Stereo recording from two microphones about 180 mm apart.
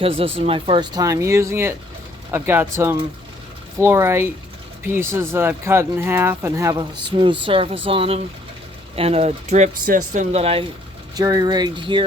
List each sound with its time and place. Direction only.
0.0 s speech: 30° right (ahead or behind)
11.1 s speech: 20° right (ahead or behind)